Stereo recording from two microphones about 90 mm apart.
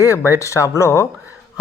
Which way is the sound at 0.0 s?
35° left (ahead or behind).